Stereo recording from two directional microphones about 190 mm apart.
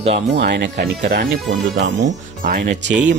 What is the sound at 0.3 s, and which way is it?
Speech, 65° right (ahead or behind).